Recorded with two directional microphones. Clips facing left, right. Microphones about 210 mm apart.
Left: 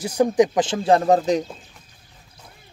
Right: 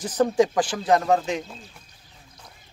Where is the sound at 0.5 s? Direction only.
25° left (ahead or behind).